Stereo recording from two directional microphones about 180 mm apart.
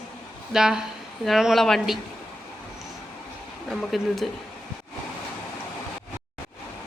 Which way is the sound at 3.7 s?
Centre (ahead or behind).